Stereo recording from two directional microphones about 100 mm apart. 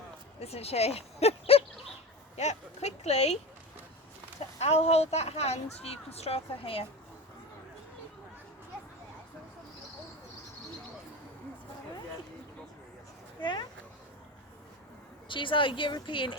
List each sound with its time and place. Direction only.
0.3 s speech: 90° left
3.0 s speech: 90° left
4.4 s speech: 90° left
13.4 s speech: 50° left (ahead or behind)
15.3 s speech: 55° left (ahead or behind)